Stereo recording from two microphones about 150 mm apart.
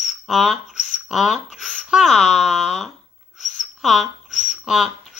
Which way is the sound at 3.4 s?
55° left (ahead or behind).